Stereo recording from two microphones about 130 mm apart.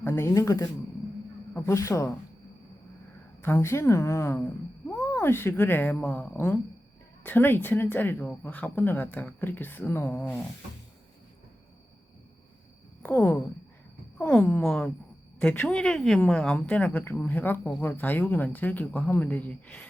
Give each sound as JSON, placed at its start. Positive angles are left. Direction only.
{"t": 0.0, "sound": "a woman's voice", "side_deg": 20}
{"t": 3.4, "sound": "a woman's voice", "side_deg": 20}
{"t": 13.0, "sound": "speech", "side_deg": 15}